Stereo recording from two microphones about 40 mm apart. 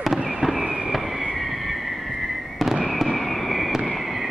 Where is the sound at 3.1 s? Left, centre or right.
Centre.